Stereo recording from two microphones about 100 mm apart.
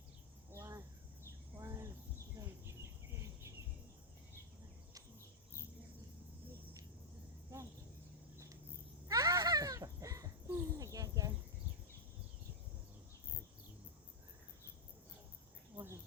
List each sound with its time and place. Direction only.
0.5 s cricket: 30° right (ahead or behind)
9.0 s a sound: 35° right (ahead or behind)
10.5 s cricket: 25° right (ahead or behind)
15.7 s cricket: 25° right (ahead or behind)